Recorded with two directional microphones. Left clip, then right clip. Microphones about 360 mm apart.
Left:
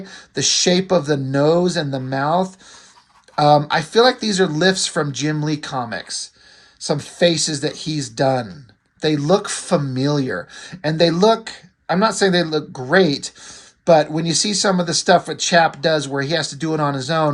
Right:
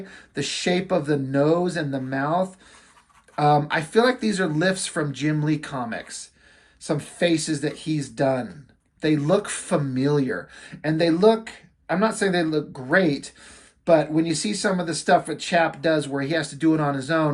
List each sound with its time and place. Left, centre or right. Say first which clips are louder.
0.1 s speech: left 10 dB; centre